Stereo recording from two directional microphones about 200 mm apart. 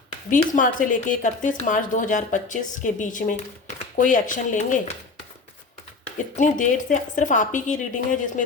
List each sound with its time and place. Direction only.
0.3 s speech: 40° left (ahead or behind)
6.3 s speech: 40° left (ahead or behind)